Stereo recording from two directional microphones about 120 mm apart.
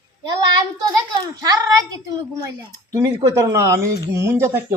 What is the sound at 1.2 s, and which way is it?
Speech, 30° right (ahead or behind).